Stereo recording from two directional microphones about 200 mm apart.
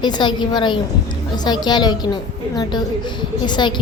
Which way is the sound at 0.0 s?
20° left (ahead or behind).